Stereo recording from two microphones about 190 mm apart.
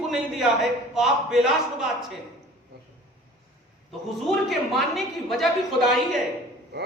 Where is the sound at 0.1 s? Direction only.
Centre (ahead or behind).